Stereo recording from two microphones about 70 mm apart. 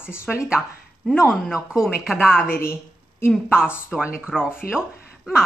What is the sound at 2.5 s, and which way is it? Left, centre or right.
Speech, left.